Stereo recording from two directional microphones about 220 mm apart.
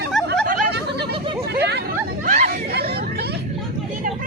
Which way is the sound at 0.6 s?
50° right (ahead or behind).